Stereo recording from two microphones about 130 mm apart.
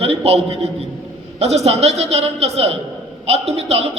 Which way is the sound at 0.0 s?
50° right (ahead or behind).